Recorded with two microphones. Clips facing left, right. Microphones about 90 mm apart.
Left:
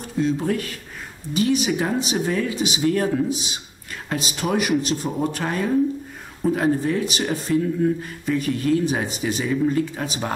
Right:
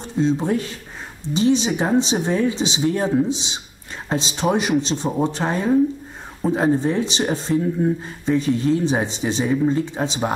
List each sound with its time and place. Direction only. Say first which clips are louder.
0.0 s speech: right 2 dB; 25° right (ahead or behind)